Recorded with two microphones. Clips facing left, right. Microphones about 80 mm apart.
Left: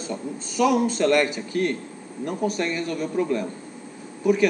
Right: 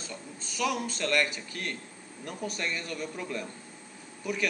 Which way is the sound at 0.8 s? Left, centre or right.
Centre.